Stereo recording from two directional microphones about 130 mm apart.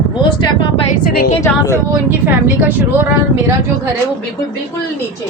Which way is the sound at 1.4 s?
25° left (ahead or behind).